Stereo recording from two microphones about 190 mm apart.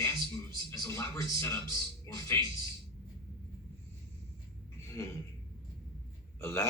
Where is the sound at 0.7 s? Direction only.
15° left (ahead or behind).